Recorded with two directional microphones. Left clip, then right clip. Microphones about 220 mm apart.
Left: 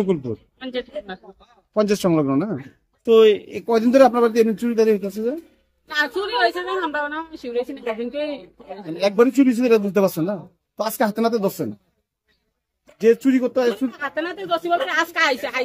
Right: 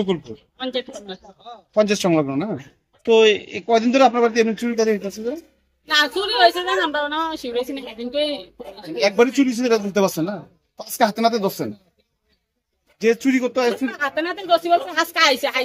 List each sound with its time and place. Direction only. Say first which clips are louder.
0.6 s a woman's voice: right 5 dB; 5° left (ahead or behind)
1.7 s a man's voice: right 1 dB; 55° left (ahead or behind)
5.9 s a woman's voice: right 4 dB; centre (ahead or behind)
8.9 s a man's voice: even; 55° left (ahead or behind)
13.0 s a man's voice: left 2 dB; 55° left (ahead or behind)
13.8 s a woman's voice: right 3 dB; 5° left (ahead or behind)